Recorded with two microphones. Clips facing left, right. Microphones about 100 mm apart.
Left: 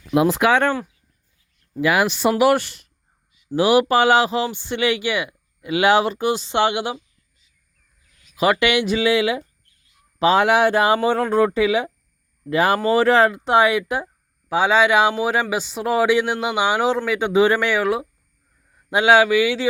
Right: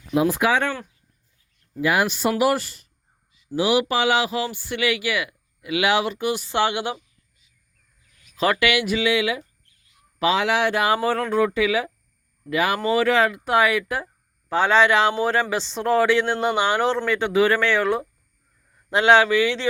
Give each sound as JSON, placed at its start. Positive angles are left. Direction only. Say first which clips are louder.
{"t": 0.1, "sound": "speech", "louder": "left 3 dB", "side_deg": 75}
{"t": 1.8, "sound": "speech", "louder": "left 3 dB", "side_deg": 90}
{"t": 2.4, "sound": "speech", "louder": "left 5 dB", "side_deg": 70}
{"t": 3.5, "sound": "speech", "louder": "left 5 dB", "side_deg": 50}
{"t": 8.4, "sound": "speech", "louder": "left 3 dB", "side_deg": 20}
{"t": 10.3, "sound": "speech", "louder": "left 6 dB", "side_deg": 50}
{"t": 10.8, "sound": "speech", "louder": "left 3 dB", "side_deg": 25}
{"t": 11.3, "sound": "speech", "louder": "left 3 dB", "side_deg": 40}
{"t": 14.5, "sound": "speech", "louder": "left 1 dB", "side_deg": 10}